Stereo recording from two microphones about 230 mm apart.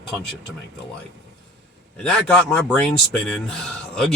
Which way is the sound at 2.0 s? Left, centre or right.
Centre.